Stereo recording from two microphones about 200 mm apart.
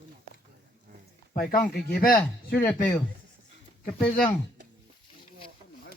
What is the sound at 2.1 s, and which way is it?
Speech, 10° left (ahead or behind).